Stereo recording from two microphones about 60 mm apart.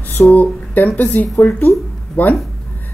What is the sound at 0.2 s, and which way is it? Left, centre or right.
Speech, centre.